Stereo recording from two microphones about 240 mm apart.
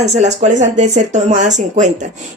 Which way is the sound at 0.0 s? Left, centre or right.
Right.